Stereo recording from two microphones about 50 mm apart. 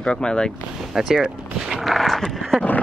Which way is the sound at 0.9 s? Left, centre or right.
Centre.